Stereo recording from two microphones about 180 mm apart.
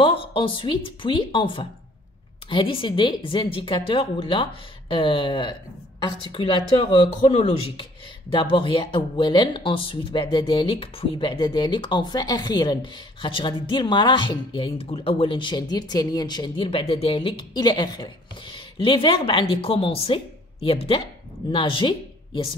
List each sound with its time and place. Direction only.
0.0 s a woman's voice: 30° left (ahead or behind)